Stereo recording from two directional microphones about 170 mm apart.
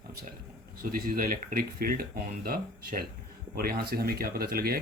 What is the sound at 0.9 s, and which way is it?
Speech, 60° right (ahead or behind).